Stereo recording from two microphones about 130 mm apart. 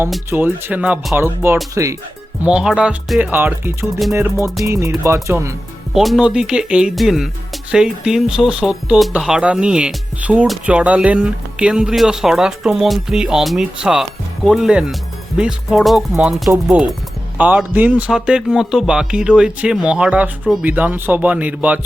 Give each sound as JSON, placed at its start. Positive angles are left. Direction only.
{"t": 0.3, "sound": "speech", "side_deg": -15}
{"t": 2.4, "sound": "speech", "side_deg": -10}
{"t": 3.3, "sound": "speech", "side_deg": -15}
{"t": 5.9, "sound": "speech", "side_deg": 0}